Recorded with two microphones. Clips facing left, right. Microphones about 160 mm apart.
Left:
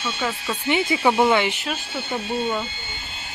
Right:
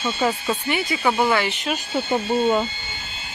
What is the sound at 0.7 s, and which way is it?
Speech, 20° left (ahead or behind).